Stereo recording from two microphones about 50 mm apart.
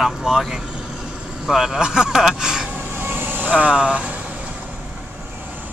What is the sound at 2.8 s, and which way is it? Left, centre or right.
Vehicle, right.